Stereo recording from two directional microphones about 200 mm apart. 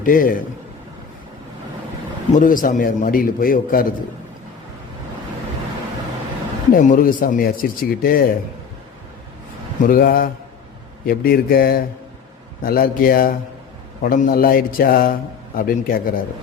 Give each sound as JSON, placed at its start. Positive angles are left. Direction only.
{"t": 0.0, "sound": "a man's voice", "side_deg": 45}
{"t": 2.4, "sound": "a man's voice", "side_deg": 40}
{"t": 6.7, "sound": "a man's voice", "side_deg": 45}
{"t": 9.8, "sound": "a man's voice", "side_deg": 45}